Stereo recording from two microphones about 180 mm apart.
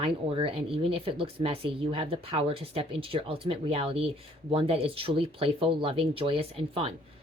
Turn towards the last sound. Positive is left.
turn(degrees=-30)  # may be behind; listen again after turning